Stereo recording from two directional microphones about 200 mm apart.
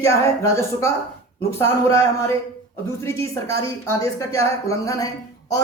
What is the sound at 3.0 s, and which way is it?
Speech, 15° left (ahead or behind).